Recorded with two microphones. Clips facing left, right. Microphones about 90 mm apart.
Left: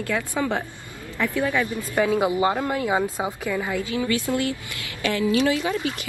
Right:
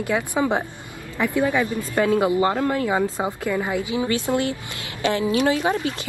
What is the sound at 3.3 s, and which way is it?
A woman's voice, 15° right (ahead or behind).